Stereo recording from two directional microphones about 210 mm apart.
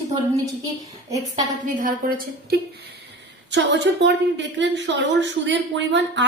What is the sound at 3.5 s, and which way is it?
A woman's voice, 55° right (ahead or behind).